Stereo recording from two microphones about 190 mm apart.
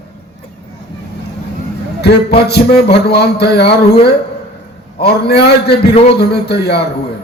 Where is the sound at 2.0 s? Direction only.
60° left (ahead or behind).